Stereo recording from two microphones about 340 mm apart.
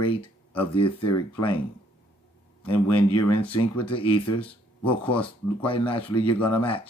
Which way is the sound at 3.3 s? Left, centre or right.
Centre.